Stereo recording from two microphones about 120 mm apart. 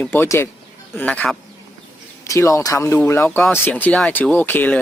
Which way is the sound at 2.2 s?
25° left (ahead or behind).